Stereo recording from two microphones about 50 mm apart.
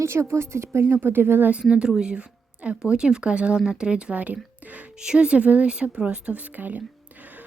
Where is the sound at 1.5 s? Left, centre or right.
Centre.